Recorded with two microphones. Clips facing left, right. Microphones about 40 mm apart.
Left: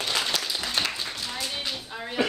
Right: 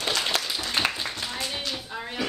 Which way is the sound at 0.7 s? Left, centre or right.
Right.